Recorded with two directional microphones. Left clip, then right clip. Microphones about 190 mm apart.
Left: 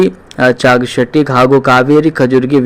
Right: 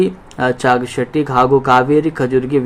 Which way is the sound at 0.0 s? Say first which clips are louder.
Left 6 dB; 15° left (ahead or behind).